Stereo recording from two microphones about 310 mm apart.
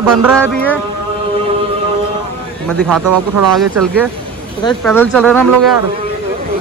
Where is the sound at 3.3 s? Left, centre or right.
Right.